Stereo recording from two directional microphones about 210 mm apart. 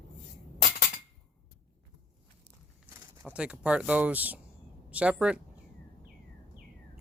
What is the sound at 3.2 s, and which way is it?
Speech, 5° right (ahead or behind).